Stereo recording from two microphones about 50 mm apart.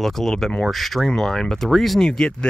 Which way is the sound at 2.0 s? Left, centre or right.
Centre.